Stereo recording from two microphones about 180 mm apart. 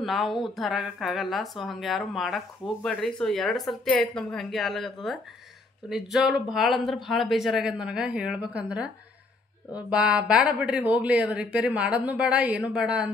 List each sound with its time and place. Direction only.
0.0 s speech: centre (ahead or behind)